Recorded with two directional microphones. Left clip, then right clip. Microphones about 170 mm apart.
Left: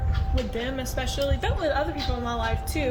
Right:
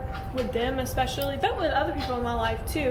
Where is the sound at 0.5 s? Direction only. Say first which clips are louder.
Right 5 dB; 50° left (ahead or behind).